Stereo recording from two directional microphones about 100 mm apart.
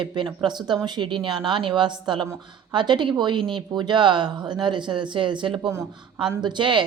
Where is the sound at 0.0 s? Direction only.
50° right (ahead or behind).